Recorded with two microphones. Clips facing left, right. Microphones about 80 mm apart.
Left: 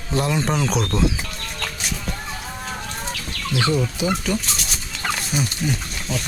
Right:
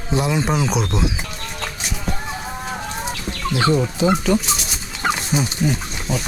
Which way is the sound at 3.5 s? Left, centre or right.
Right.